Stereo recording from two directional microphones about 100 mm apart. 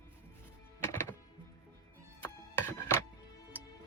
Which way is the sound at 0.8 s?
25° left (ahead or behind).